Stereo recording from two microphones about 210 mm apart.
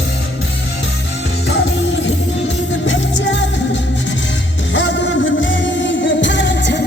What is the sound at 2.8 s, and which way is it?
Music, 60° left (ahead or behind).